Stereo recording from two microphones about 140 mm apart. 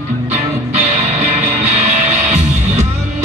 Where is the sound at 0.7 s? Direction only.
55° right (ahead or behind).